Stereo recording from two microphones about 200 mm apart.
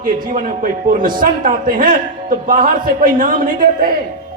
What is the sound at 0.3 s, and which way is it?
A man's voice, 40° right (ahead or behind).